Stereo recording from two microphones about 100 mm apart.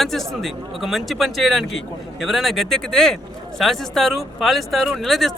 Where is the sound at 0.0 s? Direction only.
Centre (ahead or behind).